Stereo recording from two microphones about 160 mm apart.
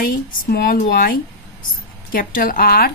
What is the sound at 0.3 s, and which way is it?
Speech, 65° left (ahead or behind).